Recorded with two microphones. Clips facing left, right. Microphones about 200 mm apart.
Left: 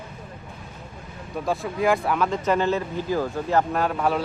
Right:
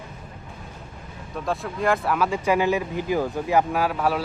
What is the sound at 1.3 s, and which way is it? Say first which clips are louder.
Speech: left 1 dB; centre (ahead or behind).